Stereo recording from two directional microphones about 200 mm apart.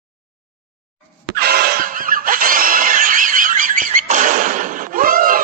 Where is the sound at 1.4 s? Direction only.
50° right (ahead or behind).